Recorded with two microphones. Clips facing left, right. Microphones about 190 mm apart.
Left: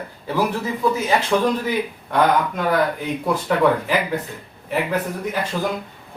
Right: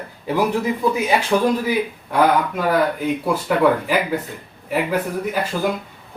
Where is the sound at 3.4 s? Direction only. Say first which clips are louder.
Right 1 dB; 5° right (ahead or behind).